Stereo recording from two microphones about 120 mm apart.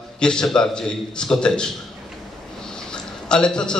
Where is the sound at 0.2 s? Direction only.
5° left (ahead or behind).